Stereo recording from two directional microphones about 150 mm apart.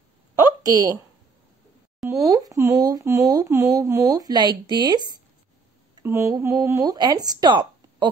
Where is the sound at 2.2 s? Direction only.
25° right (ahead or behind).